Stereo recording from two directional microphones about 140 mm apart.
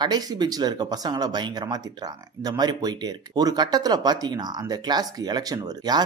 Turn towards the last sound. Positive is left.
turn(degrees=-30)  # may be behind; listen again after turning